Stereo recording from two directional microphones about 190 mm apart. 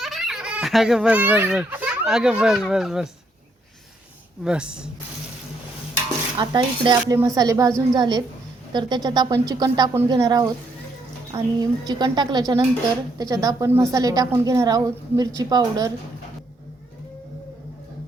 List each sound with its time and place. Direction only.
0.0 s speech: centre (ahead or behind)
4.4 s speech: 5° right (ahead or behind)
6.3 s a woman's voice: 25° right (ahead or behind)